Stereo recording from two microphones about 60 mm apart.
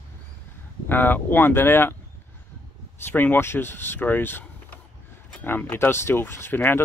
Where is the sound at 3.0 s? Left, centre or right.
Left.